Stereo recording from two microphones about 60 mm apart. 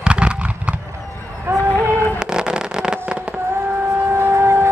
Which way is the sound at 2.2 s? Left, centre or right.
Centre.